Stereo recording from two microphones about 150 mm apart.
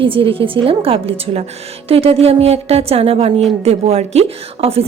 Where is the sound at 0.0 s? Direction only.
35° right (ahead or behind).